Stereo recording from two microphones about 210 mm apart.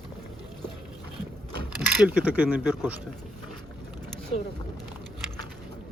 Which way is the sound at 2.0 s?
5° right (ahead or behind).